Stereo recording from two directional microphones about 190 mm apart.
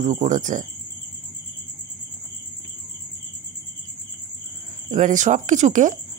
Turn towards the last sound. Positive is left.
turn(degrees=-40)  # may be behind; listen again after turning